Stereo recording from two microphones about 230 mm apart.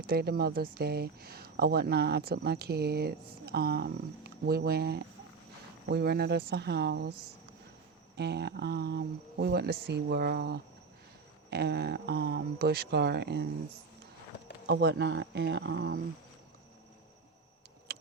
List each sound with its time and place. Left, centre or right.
0.1 s speech: right
8.1 s speech: right
14.7 s speech: right